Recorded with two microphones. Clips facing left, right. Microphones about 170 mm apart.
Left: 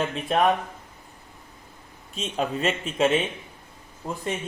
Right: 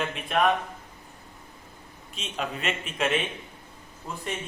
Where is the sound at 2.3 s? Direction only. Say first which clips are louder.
Left 5 dB; 35° left (ahead or behind).